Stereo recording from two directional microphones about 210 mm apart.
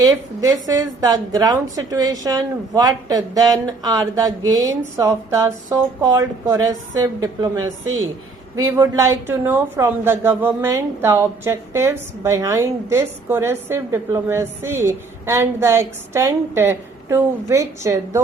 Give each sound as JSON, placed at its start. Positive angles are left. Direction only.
{"t": 0.0, "sound": "a woman's voice", "side_deg": -15}